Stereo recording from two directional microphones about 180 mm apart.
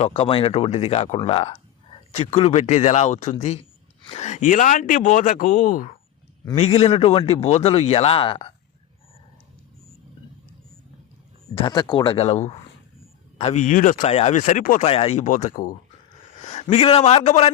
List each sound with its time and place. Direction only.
0.0 s speech: 30° left (ahead or behind)
6.6 s speech: 35° left (ahead or behind)
11.5 s speech: 25° left (ahead or behind); by 14.8 s 45° left (ahead or behind)
14.8 s a man's voice: 35° left (ahead or behind)